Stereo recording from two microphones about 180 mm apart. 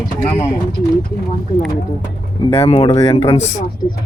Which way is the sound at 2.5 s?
35° left (ahead or behind).